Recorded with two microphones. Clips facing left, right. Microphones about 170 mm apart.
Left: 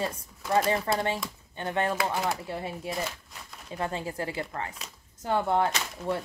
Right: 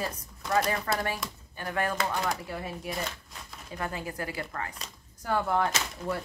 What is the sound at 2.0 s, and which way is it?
Speech, 10° left (ahead or behind).